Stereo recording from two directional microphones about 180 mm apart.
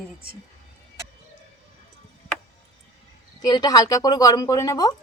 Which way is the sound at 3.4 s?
20° left (ahead or behind).